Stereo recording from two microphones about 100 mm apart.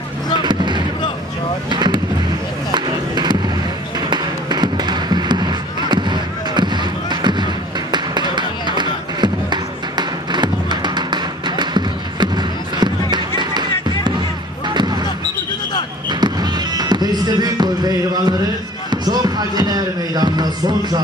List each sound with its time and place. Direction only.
0.4 s basketball bounce: 50° right (ahead or behind)
1.7 s fireworks: 50° right (ahead or behind)
2.7 s music: 45° right (ahead or behind)
14.7 s basketball bounce: 45° right (ahead or behind)
16.1 s basketball bounce: 45° right (ahead or behind)